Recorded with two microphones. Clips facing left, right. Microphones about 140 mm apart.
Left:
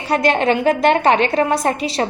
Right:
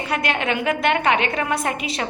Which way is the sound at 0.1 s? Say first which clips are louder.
Left 8 dB; 35° left (ahead or behind).